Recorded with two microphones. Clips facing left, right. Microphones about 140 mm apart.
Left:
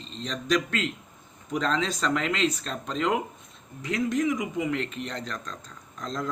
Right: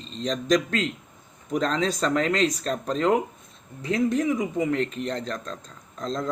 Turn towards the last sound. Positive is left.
turn(degrees=-30)  # may be behind; listen again after turning